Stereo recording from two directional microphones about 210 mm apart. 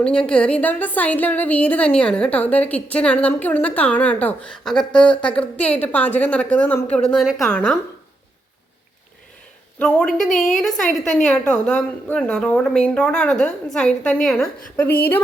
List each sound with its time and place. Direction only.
0.0 s a woman's voice: 5° left (ahead or behind)
9.7 s a woman's voice: 5° left (ahead or behind)
10.2 s a woman's voice: 35° left (ahead or behind)
10.6 s a woman's voice: centre (ahead or behind)